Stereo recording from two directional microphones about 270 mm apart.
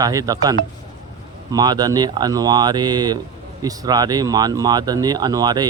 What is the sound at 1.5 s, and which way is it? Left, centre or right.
Speech, centre.